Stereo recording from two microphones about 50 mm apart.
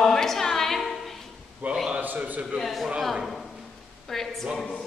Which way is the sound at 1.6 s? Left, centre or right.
Right.